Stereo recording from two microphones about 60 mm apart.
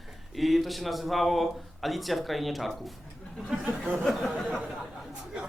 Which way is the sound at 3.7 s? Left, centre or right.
Right.